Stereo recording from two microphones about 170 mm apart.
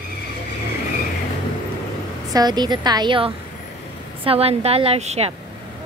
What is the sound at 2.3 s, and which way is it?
A woman's voice, 25° right (ahead or behind).